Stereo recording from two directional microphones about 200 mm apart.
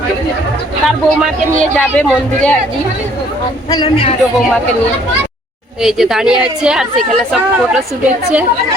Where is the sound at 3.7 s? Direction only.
25° left (ahead or behind).